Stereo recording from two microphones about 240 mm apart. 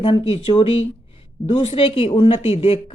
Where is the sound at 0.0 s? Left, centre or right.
Left.